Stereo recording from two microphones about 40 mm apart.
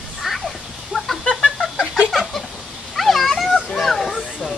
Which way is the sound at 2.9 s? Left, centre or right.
Centre.